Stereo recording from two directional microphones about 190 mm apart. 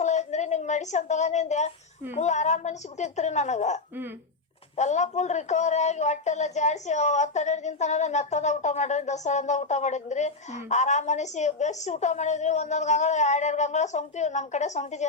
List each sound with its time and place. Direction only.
0.0 s a sound: 40° left (ahead or behind)
2.1 s a woman's voice: 40° left (ahead or behind)
4.8 s a woman's voice: 40° left (ahead or behind)